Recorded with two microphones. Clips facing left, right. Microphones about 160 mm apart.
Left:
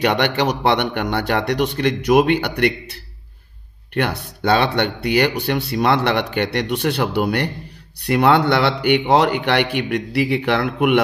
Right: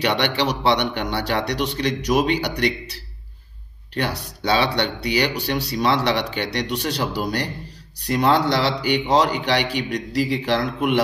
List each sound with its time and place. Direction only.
0.0 s a man's voice: 50° left (ahead or behind)